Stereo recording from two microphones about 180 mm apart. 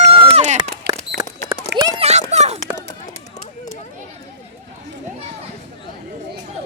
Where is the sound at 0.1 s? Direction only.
35° right (ahead or behind).